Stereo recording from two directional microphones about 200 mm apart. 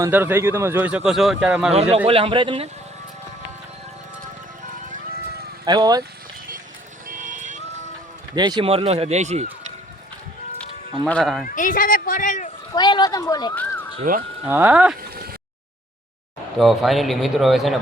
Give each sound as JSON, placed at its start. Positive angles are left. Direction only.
{"t": 0.0, "sound": "speech", "side_deg": -10}
{"t": 1.7, "sound": "speech", "side_deg": -30}
{"t": 5.6, "sound": "speech", "side_deg": -20}
{"t": 7.1, "sound": "vehicle", "side_deg": -40}
{"t": 8.4, "sound": "speech", "side_deg": -20}
{"t": 11.0, "sound": "a man's voice", "side_deg": 0}
{"t": 11.4, "sound": "speech", "side_deg": 40}
{"t": 12.7, "sound": "speech", "side_deg": 20}
{"t": 14.1, "sound": "speech", "side_deg": -45}
{"t": 14.4, "sound": "speech", "side_deg": -10}
{"t": 15.1, "sound": "a sound", "side_deg": -50}
{"t": 16.6, "sound": "a man's voice", "side_deg": 0}